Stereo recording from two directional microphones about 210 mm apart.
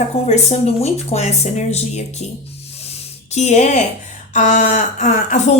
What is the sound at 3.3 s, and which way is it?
Speech, 35° left (ahead or behind).